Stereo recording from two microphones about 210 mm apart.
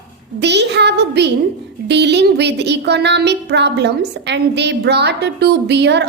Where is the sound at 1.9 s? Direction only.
55° right (ahead or behind).